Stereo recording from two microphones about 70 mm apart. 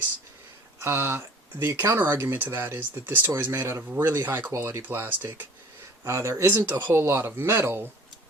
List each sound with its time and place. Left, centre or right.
0.8 s speech: right
6.1 s speech: right
6.6 s speech: right